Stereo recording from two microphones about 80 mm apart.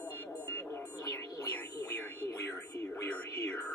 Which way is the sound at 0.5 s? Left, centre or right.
Left.